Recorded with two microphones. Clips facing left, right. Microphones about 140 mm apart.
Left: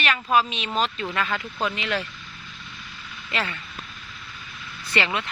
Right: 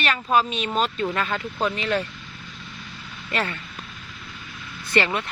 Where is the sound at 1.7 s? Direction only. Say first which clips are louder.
Right 3 dB; 40° right (ahead or behind).